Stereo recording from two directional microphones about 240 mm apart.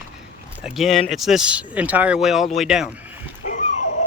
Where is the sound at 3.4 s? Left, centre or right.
Left.